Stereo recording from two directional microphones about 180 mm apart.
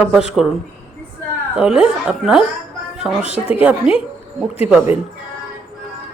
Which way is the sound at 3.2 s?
35° left (ahead or behind).